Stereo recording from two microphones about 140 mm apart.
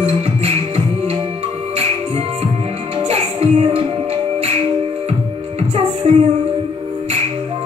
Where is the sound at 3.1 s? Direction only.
45° right (ahead or behind).